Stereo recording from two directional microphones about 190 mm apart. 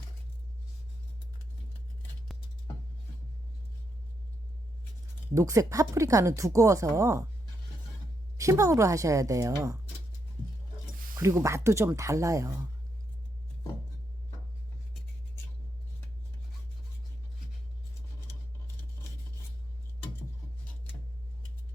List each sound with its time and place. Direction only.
2.0 s a sound: centre (ahead or behind)
5.3 s speech: 15° right (ahead or behind)
8.4 s speech: 15° right (ahead or behind)
11.2 s speech: 15° right (ahead or behind)